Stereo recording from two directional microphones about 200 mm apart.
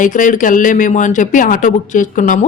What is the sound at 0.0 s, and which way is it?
Speech, 40° left (ahead or behind).